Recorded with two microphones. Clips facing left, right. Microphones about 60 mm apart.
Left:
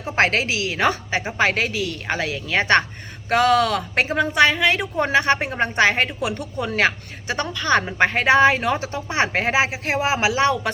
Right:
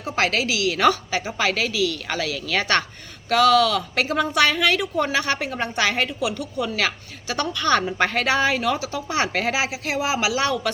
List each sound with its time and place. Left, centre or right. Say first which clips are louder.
0.0 s speech: left 3 dB; left
7.5 s a woman's voice: even; centre
7.8 s speech: left 2 dB; left